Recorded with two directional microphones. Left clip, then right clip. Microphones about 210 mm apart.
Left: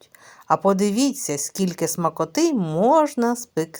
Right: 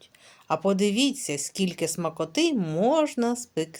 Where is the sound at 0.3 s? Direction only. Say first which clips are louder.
Left 6 dB; 20° left (ahead or behind).